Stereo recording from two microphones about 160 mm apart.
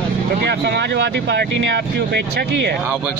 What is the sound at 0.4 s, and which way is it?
Speech, 90° right.